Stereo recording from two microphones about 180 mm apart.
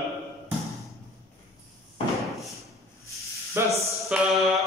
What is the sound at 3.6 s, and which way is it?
Speech, 15° right (ahead or behind).